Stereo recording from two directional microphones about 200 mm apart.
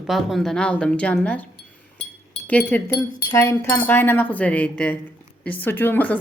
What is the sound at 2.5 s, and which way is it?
Speech, 10° left (ahead or behind).